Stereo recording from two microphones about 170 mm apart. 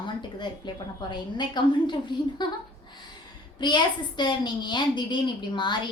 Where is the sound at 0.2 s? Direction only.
25° left (ahead or behind).